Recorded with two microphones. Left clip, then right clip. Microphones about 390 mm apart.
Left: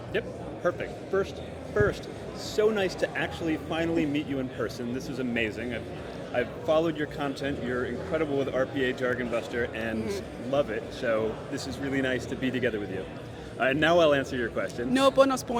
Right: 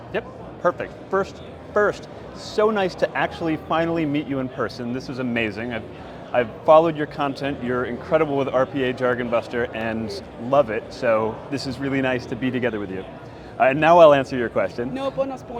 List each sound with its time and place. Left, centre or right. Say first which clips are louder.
0.1 s speech: right 3 dB; centre
14.9 s a man's voice: left 8 dB; left